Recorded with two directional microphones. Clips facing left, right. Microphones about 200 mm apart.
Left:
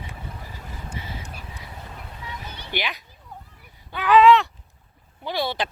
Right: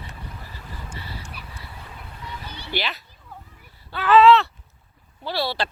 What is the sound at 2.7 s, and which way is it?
Speech, 15° left (ahead or behind).